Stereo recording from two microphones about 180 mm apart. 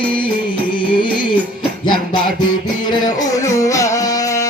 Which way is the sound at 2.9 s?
20° left (ahead or behind).